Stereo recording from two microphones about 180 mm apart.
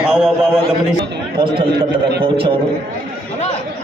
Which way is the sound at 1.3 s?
25° right (ahead or behind).